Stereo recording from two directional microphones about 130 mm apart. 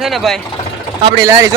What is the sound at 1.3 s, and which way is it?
Speech, 25° right (ahead or behind).